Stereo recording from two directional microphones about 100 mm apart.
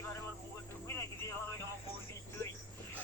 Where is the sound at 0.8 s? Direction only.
25° left (ahead or behind).